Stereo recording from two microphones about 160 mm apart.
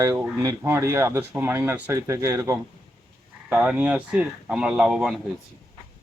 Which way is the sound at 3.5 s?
5° right (ahead or behind).